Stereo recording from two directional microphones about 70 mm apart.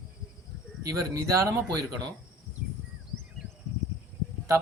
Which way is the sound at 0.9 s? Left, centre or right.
Right.